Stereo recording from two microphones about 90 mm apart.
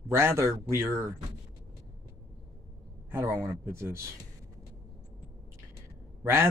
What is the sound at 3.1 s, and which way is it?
Speech, 30° right (ahead or behind).